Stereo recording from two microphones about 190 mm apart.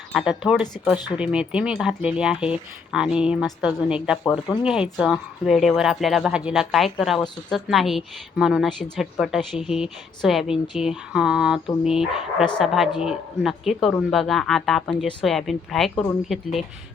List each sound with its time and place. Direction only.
0.1 s speech: 5° right (ahead or behind)
0.9 s speech: 20° left (ahead or behind)
1.2 s speech: 5° right (ahead or behind)
4.2 s speech: 15° left (ahead or behind)
4.6 s speech: 5° right (ahead or behind)